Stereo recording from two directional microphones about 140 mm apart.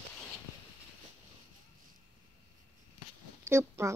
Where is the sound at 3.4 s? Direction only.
20° right (ahead or behind).